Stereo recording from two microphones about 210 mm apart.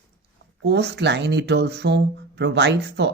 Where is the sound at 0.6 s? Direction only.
55° right (ahead or behind).